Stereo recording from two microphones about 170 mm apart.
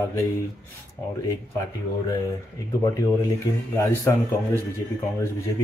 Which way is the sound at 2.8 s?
20° left (ahead or behind).